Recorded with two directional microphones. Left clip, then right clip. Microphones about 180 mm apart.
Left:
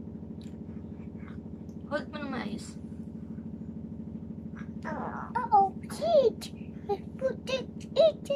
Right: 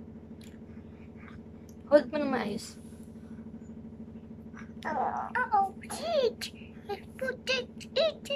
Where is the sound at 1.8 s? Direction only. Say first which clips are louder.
Right 11 dB; 30° right (ahead or behind).